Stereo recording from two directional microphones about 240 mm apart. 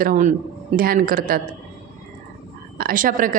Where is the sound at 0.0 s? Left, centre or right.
Right.